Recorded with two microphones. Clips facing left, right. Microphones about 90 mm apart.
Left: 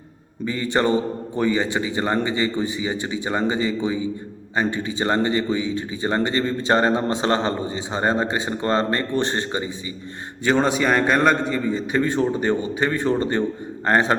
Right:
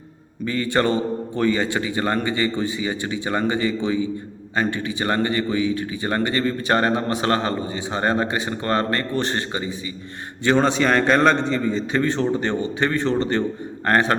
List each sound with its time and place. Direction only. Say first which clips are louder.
0.4 s a man's voice: even; 20° left (ahead or behind)
10.4 s a man's voice: right 1 dB; 5° left (ahead or behind)